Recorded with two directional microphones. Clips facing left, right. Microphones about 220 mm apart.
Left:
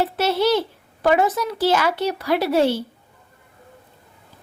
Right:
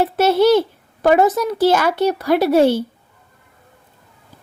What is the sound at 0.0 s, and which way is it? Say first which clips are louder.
A woman's voice: right 6 dB; 50° right (ahead or behind).